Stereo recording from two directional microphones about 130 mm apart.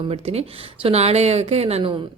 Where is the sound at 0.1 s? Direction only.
50° right (ahead or behind).